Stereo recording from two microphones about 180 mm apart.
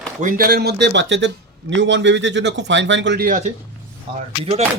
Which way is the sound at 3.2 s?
40° right (ahead or behind).